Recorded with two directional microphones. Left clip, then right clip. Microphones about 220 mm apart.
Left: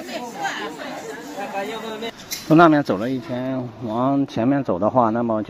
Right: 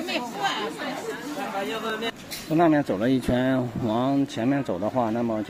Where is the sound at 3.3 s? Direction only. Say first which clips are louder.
Right 2 dB; 10° right (ahead or behind).